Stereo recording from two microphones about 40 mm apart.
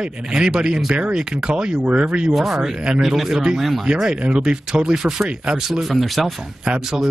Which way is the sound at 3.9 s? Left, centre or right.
Centre.